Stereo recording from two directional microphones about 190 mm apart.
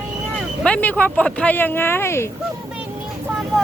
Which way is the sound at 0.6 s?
10° left (ahead or behind).